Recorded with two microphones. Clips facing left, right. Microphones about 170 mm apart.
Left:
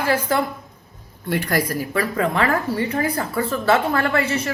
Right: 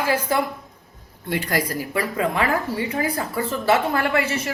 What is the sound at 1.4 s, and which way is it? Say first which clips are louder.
A woman's voice: left 2 dB; 20° right (ahead or behind).